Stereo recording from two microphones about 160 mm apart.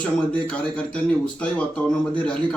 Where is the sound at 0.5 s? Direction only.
5° left (ahead or behind).